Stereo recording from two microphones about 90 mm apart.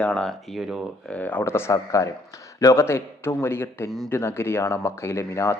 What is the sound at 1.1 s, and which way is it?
Speech, 20° left (ahead or behind).